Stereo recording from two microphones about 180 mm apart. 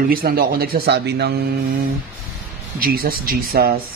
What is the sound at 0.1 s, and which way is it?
Speech, 55° right (ahead or behind).